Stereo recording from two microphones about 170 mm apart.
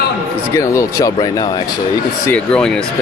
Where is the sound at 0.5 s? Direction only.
20° left (ahead or behind).